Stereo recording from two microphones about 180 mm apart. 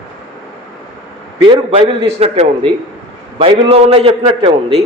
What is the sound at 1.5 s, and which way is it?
Speech, 25° right (ahead or behind).